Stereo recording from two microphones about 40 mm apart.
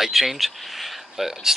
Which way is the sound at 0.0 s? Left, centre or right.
Centre.